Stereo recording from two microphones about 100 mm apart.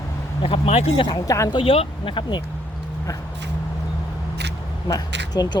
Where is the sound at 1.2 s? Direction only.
30° left (ahead or behind).